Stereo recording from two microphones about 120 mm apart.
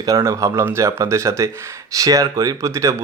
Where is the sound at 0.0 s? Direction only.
30° right (ahead or behind).